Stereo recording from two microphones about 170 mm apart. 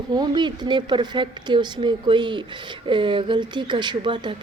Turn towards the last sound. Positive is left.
turn(degrees=-30)  # may be behind; listen again after turning